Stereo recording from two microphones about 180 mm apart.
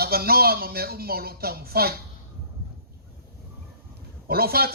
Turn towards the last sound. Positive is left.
turn(degrees=-60)  # may be behind; listen again after turning